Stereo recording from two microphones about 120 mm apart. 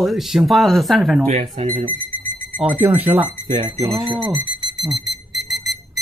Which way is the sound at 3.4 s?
90° right.